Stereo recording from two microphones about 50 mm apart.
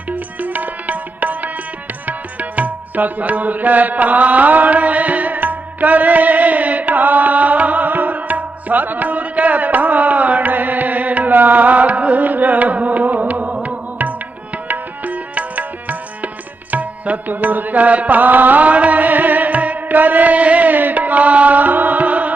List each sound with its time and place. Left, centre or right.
0.1 s music: right